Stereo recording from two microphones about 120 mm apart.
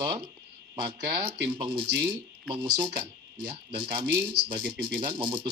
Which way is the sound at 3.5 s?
45° right (ahead or behind).